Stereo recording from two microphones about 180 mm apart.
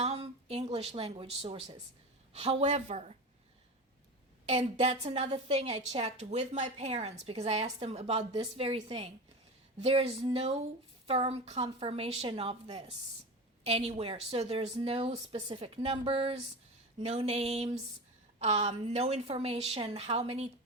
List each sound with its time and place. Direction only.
0.0 s a sound: 35° right (ahead or behind)
2.3 s a woman's voice: 35° right (ahead or behind)
4.4 s a woman's voice: 35° right (ahead or behind)